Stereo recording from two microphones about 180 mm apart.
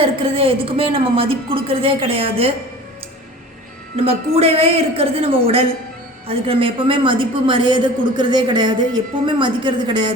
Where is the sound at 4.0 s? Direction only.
35° right (ahead or behind).